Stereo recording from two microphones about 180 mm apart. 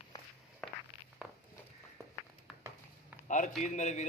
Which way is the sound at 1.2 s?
5° right (ahead or behind).